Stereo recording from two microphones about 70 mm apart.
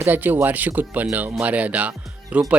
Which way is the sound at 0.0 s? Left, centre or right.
Right.